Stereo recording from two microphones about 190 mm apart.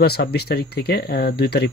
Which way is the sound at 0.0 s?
55° left (ahead or behind).